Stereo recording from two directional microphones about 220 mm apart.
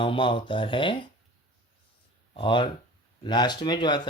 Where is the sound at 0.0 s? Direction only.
20° left (ahead or behind).